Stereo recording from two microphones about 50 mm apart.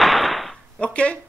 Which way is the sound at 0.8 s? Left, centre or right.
Left.